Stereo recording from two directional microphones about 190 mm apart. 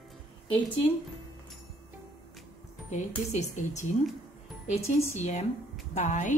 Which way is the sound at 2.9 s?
40° left (ahead or behind).